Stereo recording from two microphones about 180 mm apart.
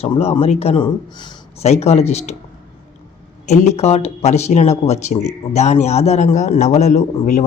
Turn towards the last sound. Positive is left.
turn(degrees=40)  # may be behind; listen again after turning